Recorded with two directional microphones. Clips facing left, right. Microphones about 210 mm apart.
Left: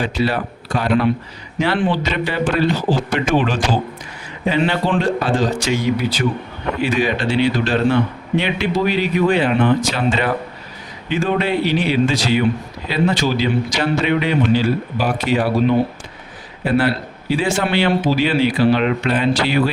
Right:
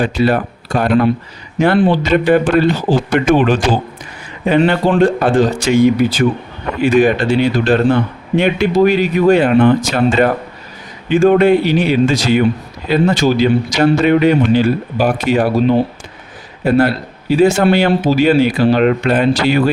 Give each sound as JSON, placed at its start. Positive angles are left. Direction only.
{"t": 0.0, "sound": "a man's voice", "side_deg": -50}
{"t": 16.6, "sound": "a man's voice", "side_deg": -45}